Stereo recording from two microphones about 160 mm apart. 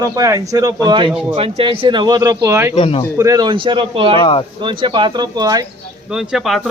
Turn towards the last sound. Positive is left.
turn(degrees=0)  # may be behind; listen again after turning